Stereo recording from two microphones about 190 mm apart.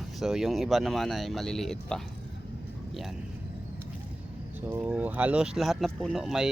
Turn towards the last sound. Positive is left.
turn(degrees=-5)  # may be behind; listen again after turning